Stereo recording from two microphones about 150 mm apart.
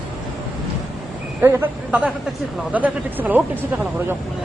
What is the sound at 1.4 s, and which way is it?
Speech, 15° right (ahead or behind).